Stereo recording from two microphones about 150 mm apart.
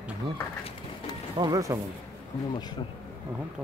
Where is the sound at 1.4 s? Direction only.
25° right (ahead or behind).